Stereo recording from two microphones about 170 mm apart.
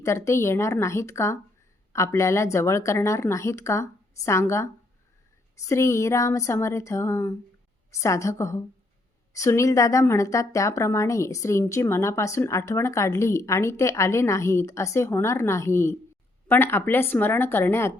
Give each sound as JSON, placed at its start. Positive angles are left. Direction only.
{"t": 0.0, "sound": "speech", "side_deg": 15}